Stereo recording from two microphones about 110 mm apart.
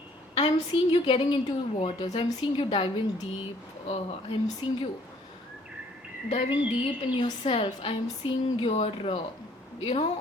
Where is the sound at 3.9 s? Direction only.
55° left (ahead or behind).